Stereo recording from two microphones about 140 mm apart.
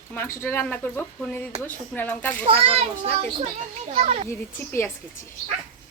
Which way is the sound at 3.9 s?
50° right (ahead or behind).